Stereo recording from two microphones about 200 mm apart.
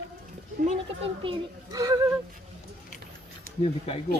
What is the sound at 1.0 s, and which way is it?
Speech, 25° right (ahead or behind).